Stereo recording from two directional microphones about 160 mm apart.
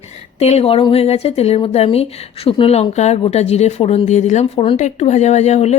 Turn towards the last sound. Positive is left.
turn(degrees=45)  # may be behind; listen again after turning